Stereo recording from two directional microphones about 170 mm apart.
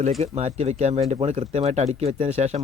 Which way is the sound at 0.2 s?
40° right (ahead or behind).